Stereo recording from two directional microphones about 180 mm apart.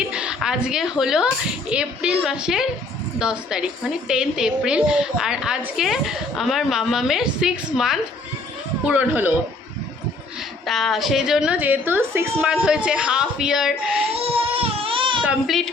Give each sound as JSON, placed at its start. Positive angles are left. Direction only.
{"t": 0.1, "sound": "a woman's voice", "side_deg": -5}
{"t": 10.7, "sound": "a woman's voice", "side_deg": 0}
{"t": 14.5, "sound": "baby cry", "side_deg": -30}
{"t": 15.2, "sound": "speech", "side_deg": -5}